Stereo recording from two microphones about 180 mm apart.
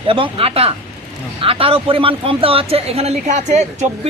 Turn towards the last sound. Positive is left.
turn(degrees=-40)  # may be behind; listen again after turning